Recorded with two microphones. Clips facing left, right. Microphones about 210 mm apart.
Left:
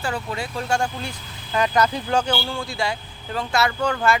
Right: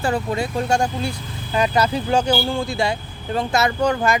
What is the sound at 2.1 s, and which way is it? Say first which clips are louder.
Speech: right 4 dB; 10° right (ahead or behind).